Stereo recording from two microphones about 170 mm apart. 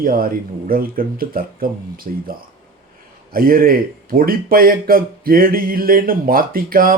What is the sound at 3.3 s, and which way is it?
Speech, 55° right (ahead or behind).